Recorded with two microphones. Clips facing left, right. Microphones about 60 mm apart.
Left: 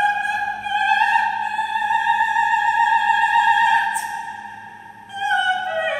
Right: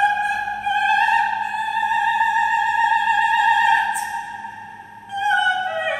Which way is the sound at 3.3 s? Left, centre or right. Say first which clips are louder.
Even; centre.